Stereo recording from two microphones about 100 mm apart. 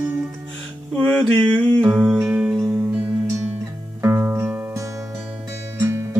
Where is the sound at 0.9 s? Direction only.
15° left (ahead or behind).